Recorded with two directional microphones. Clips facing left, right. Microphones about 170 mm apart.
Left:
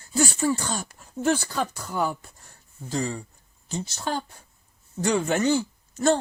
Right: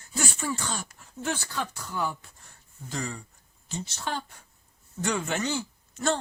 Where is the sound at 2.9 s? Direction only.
30° left (ahead or behind).